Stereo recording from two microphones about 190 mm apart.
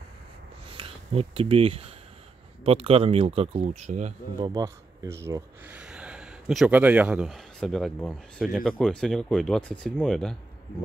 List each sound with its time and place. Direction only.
0.7 s speech: 30° right (ahead or behind)
4.4 s speech: 15° right (ahead or behind); by 10.3 s centre (ahead or behind)